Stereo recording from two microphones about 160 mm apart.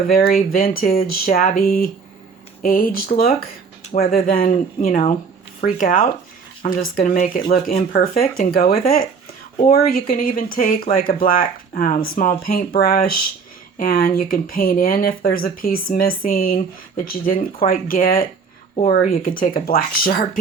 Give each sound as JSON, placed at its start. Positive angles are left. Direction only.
{"t": 0.1, "sound": "speech", "side_deg": 65}